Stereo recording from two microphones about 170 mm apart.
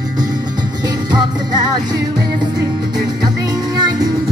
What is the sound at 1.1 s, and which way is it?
Music, 25° right (ahead or behind).